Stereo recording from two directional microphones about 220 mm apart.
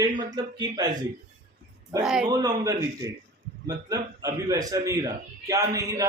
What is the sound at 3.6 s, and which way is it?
A man's voice, 15° right (ahead or behind).